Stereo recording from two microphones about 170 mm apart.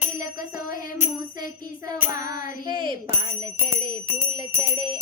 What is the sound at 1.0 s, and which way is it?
Bicycle bell, 20° right (ahead or behind).